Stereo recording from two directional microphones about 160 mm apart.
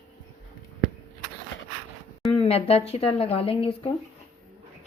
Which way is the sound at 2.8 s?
40° left (ahead or behind).